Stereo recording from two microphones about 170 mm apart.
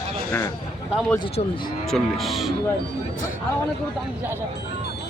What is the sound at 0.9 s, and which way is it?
Cattle, centre (ahead or behind).